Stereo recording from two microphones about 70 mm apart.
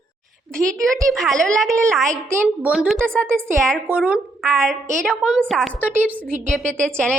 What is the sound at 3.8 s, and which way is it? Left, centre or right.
Speech, centre.